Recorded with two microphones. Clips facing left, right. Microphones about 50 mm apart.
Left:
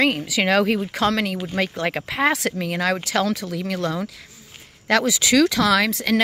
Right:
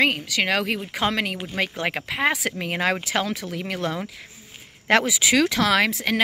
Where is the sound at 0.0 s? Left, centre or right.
Centre.